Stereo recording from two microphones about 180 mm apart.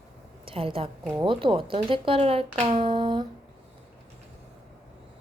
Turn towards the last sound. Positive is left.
turn(degrees=-25)  # may be behind; listen again after turning